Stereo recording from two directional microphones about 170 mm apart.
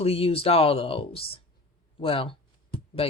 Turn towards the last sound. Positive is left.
turn(degrees=35)  # may be behind; listen again after turning